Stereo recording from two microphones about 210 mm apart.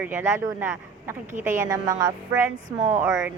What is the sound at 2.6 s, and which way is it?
Speech, 35° right (ahead or behind).